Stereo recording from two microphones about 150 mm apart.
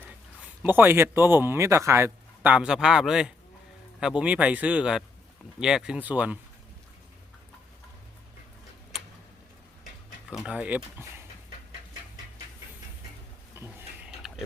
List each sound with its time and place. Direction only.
0.6 s speech: 15° right (ahead or behind)
10.4 s speech: 10° right (ahead or behind)
13.6 s a sound: 15° right (ahead or behind)
14.2 s pig: centre (ahead or behind)